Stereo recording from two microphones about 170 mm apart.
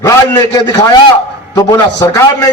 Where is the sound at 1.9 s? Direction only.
20° left (ahead or behind).